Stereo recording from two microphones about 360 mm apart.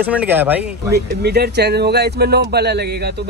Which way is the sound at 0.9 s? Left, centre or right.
Right.